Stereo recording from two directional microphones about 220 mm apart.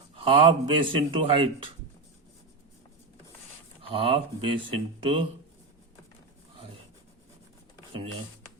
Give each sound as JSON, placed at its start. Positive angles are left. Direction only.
{"t": 0.2, "sound": "speech", "side_deg": -25}
{"t": 3.8, "sound": "speech", "side_deg": -25}